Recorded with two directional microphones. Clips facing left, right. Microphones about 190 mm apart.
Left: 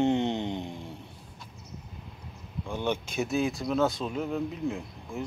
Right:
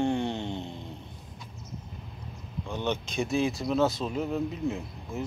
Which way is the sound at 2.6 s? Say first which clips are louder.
Left 1 dB; 10° left (ahead or behind).